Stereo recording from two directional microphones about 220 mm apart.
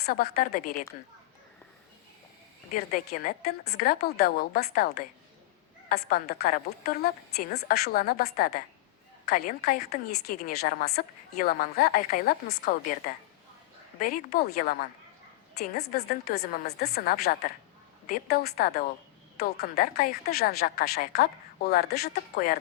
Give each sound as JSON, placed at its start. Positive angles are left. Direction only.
{"t": 0.0, "sound": "speech", "side_deg": 45}
{"t": 2.7, "sound": "a woman's voice", "side_deg": 35}
{"t": 5.9, "sound": "a woman's voice", "side_deg": 40}